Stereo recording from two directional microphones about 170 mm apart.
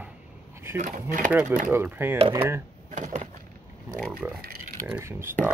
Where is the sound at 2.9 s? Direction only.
50° right (ahead or behind).